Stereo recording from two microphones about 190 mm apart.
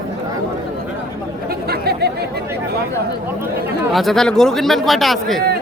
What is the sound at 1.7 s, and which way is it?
Chatter, 55° right (ahead or behind).